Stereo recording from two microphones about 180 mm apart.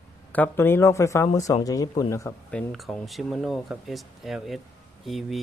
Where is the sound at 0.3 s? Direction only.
10° left (ahead or behind).